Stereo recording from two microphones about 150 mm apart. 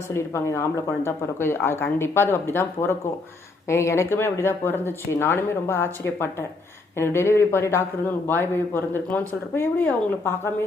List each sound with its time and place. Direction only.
0.1 s speech: 20° left (ahead or behind)